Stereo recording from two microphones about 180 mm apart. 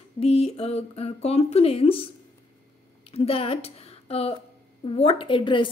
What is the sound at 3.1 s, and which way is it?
A woman's voice, 30° left (ahead or behind).